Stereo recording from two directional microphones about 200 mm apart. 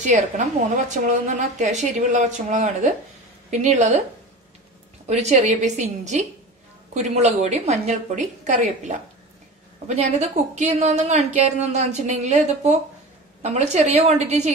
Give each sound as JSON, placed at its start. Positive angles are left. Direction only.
{"t": 0.8, "sound": "a woman's voice", "side_deg": -35}
{"t": 5.0, "sound": "a woman's voice", "side_deg": -35}